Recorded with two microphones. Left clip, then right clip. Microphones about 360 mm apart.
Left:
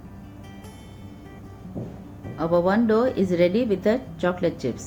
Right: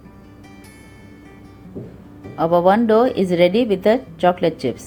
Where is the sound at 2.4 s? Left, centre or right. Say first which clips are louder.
Right 7 dB; centre.